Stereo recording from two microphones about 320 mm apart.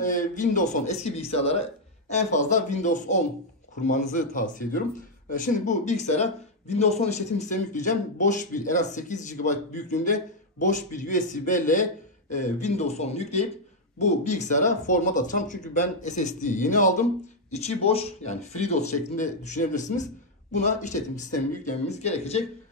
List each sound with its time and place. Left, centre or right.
0.0 s speech: left